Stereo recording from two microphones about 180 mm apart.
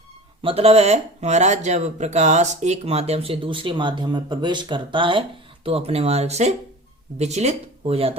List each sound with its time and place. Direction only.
0.4 s speech: 35° right (ahead or behind)